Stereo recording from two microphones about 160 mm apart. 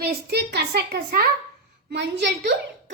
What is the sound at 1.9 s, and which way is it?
Speech, 90° right.